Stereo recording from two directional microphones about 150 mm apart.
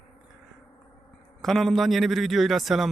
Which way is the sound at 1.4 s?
Centre (ahead or behind).